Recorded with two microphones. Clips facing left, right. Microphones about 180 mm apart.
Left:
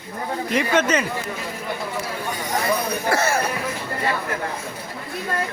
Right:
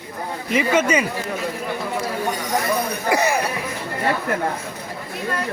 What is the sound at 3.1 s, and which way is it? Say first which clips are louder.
Speech: right 2 dB; 15° right (ahead or behind).